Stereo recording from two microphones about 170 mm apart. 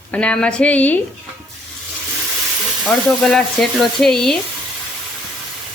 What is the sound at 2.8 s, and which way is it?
Speech, centre (ahead or behind).